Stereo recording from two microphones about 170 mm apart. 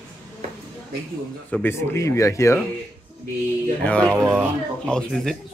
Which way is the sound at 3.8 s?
5° left (ahead or behind).